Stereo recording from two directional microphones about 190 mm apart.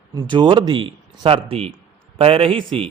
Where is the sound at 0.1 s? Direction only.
20° right (ahead or behind).